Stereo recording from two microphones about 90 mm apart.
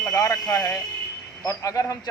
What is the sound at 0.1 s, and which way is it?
A man's voice, 40° left (ahead or behind).